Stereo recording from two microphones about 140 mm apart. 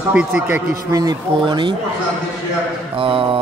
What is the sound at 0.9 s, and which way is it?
Speech, 30° right (ahead or behind).